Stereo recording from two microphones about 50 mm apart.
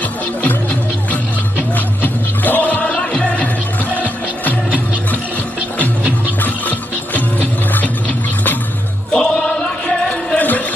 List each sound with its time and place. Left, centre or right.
2.4 s music: left
3.9 s music: left
7.2 s music: left
9.1 s music: centre